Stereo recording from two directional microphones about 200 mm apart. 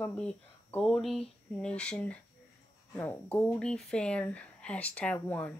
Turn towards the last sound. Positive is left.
turn(degrees=10)  # may be behind; listen again after turning